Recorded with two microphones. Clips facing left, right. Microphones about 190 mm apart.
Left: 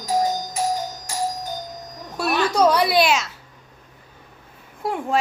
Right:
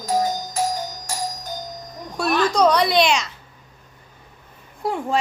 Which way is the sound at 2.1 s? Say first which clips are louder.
Right 1 dB; 5° left (ahead or behind).